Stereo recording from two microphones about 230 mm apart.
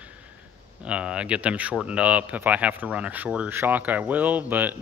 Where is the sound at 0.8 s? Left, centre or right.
Centre.